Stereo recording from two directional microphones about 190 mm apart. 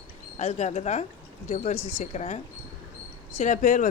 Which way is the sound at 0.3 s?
35° left (ahead or behind).